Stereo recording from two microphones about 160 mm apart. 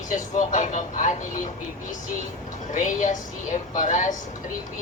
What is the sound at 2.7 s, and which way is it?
Speech, 50° left (ahead or behind).